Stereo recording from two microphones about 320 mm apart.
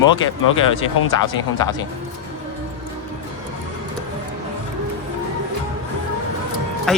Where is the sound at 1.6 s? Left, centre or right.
Centre.